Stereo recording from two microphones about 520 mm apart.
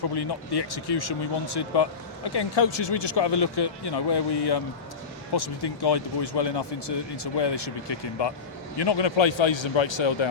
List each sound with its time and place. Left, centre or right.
0.2 s a man's voice: left